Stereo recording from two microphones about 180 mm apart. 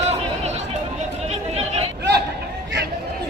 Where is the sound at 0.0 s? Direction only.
35° right (ahead or behind).